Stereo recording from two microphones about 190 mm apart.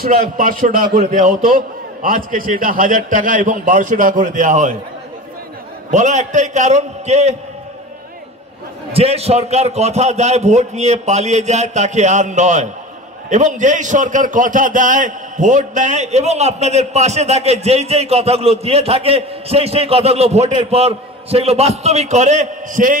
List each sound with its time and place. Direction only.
0.0 s a man's voice: 45° right (ahead or behind)
5.9 s a man's voice: 40° right (ahead or behind)
8.9 s a man's voice: 30° right (ahead or behind)